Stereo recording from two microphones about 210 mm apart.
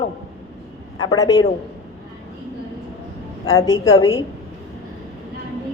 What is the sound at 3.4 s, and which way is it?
Speech, 15° left (ahead or behind).